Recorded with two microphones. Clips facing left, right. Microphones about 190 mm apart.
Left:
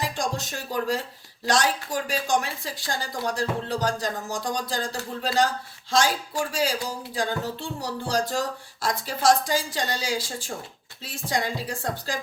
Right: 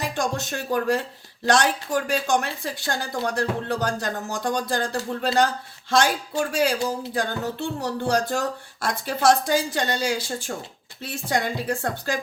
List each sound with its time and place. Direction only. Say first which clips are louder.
0.0 s a woman's voice: right 2 dB; 60° right (ahead or behind)
6.5 s a woman's voice: right 6 dB; 60° right (ahead or behind)